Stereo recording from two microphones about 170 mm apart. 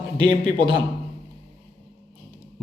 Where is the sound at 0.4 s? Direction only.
30° right (ahead or behind).